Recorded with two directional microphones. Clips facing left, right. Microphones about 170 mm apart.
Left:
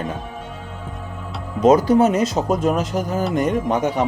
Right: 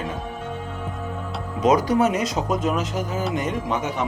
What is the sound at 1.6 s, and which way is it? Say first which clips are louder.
Speech: left 5 dB; 30° left (ahead or behind).